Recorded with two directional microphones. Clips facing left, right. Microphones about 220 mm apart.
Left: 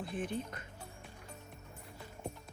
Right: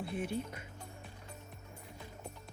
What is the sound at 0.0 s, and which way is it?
Speech, 10° right (ahead or behind).